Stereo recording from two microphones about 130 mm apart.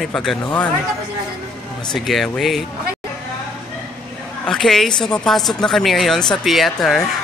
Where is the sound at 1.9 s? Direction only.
Centre (ahead or behind).